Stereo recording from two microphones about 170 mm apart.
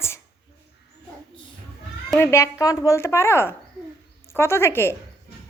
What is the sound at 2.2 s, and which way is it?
Speech, 15° left (ahead or behind).